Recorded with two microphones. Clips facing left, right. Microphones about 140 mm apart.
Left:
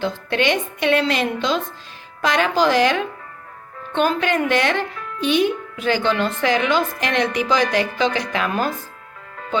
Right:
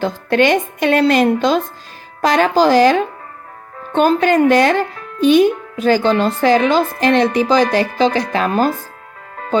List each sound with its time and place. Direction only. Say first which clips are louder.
0.0 s a woman's voice: right 6 dB; 45° right (ahead or behind)
9.3 s music: right 7 dB; 40° right (ahead or behind)